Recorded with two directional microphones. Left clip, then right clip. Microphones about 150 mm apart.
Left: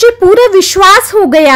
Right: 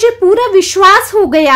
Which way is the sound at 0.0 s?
40° left (ahead or behind).